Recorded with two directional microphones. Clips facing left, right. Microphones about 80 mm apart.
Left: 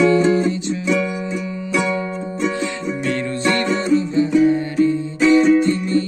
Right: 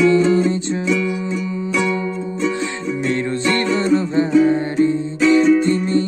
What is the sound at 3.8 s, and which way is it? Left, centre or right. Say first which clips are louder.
Music: even; right.